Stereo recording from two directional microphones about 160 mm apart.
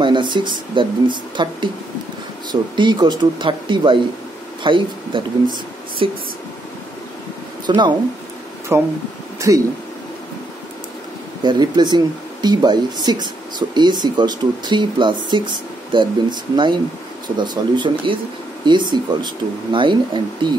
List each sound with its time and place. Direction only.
0.0 s speech: 30° right (ahead or behind)
7.6 s speech: 30° right (ahead or behind)
8.7 s speech: 15° right (ahead or behind)
11.4 s speech: 25° right (ahead or behind)